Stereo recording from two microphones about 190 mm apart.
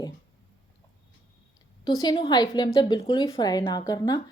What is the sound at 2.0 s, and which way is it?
A woman's voice, 25° left (ahead or behind).